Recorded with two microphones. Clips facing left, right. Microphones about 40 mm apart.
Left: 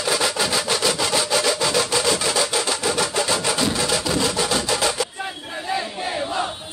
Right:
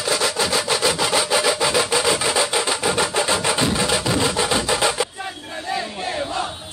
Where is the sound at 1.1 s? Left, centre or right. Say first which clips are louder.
Right 2 dB; centre.